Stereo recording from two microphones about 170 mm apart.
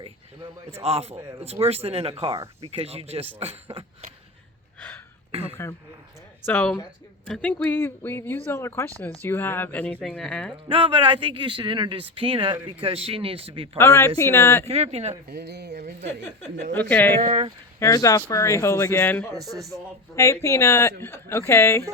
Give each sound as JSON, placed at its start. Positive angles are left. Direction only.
{"t": 0.8, "sound": "speech", "side_deg": -35}
{"t": 4.8, "sound": "a sound", "side_deg": 10}
{"t": 5.6, "sound": "speech", "side_deg": 15}
{"t": 10.7, "sound": "speech", "side_deg": -30}
{"t": 13.7, "sound": "speech", "side_deg": 15}
{"t": 14.7, "sound": "speech", "side_deg": -40}
{"t": 15.3, "sound": "speech", "side_deg": -70}
{"t": 16.9, "sound": "speech", "side_deg": 10}
{"t": 17.2, "sound": "speech", "side_deg": -40}
{"t": 17.7, "sound": "speech", "side_deg": 20}
{"t": 19.3, "sound": "a man's voice", "side_deg": 0}
{"t": 20.1, "sound": "speech", "side_deg": 15}